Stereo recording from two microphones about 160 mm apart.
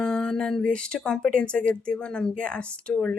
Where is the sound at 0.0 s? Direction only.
5° left (ahead or behind).